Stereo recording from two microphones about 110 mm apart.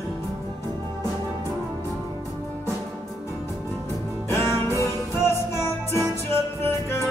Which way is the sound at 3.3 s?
25° left (ahead or behind).